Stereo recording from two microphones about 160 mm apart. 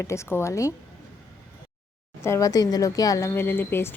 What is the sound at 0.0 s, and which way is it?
Speech, 15° left (ahead or behind).